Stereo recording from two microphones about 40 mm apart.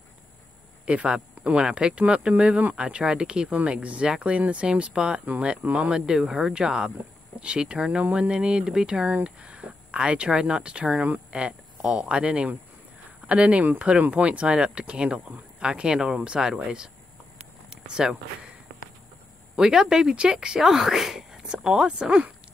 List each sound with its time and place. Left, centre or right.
0.8 s speech: right
3.4 s speech: right; by 18.1 s centre
19.5 s speech: centre